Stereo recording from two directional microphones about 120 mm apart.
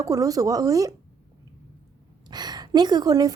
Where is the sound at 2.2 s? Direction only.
35° right (ahead or behind).